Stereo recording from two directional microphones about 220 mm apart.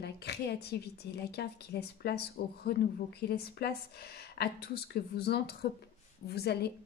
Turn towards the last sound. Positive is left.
turn(degrees=45)  # may be behind; listen again after turning